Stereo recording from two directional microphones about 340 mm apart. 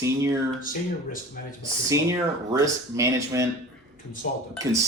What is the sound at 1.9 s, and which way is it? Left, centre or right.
Speech, centre.